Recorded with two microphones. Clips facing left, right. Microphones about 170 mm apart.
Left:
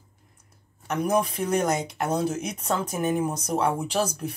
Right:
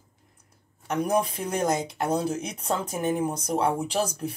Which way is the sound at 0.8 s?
30° right (ahead or behind).